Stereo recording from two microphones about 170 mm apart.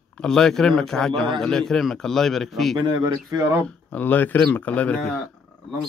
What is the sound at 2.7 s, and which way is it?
Speech, 25° right (ahead or behind).